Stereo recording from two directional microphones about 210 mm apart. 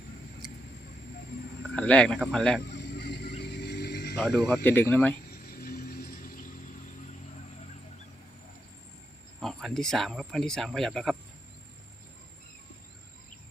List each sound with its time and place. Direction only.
1.7 s speech: 5° left (ahead or behind)
2.7 s vehicle: 55° left (ahead or behind)
4.2 s speech: centre (ahead or behind)
5.3 s vehicle: 45° left (ahead or behind)
9.4 s speech: centre (ahead or behind)